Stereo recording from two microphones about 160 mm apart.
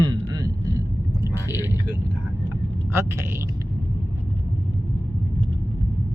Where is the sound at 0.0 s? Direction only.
25° right (ahead or behind).